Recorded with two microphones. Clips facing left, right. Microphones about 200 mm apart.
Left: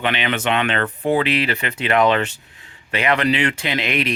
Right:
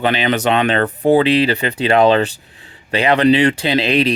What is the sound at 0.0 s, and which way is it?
Speech, 35° right (ahead or behind).